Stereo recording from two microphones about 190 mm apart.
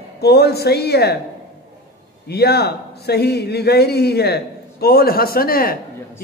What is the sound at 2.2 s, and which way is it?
A man's voice, 55° left (ahead or behind).